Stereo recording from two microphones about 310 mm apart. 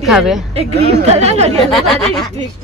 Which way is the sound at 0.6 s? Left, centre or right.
Centre.